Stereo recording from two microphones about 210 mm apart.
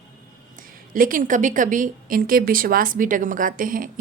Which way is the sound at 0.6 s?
40° right (ahead or behind).